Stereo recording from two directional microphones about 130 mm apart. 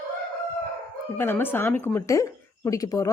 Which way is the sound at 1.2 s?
15° left (ahead or behind).